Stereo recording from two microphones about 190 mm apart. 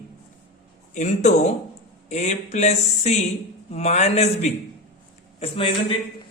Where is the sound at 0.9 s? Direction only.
40° left (ahead or behind).